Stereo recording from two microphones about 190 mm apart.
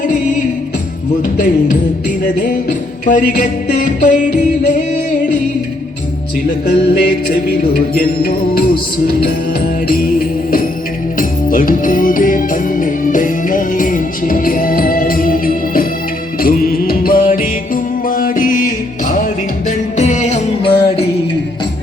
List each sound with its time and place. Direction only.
1.4 s music: 45° left (ahead or behind)
6.7 s music: 55° left (ahead or behind); by 20.7 s 35° left (ahead or behind)
20.7 s music: 60° left (ahead or behind)